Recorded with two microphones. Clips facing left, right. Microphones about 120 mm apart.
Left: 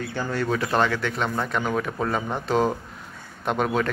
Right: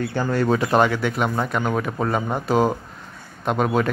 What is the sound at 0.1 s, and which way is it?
Speech, 45° right (ahead or behind).